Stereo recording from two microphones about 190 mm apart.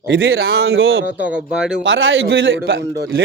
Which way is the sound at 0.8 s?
90° right.